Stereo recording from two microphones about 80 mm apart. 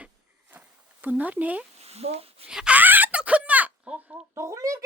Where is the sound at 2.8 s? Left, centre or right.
Right.